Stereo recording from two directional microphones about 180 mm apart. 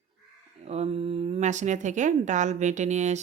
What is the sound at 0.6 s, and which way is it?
Speech, 35° right (ahead or behind).